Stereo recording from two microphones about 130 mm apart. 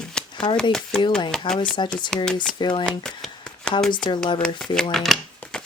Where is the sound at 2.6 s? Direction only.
35° left (ahead or behind).